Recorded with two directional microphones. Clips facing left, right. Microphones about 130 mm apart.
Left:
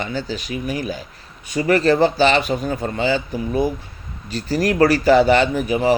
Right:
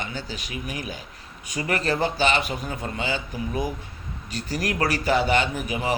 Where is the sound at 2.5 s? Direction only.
45° left (ahead or behind).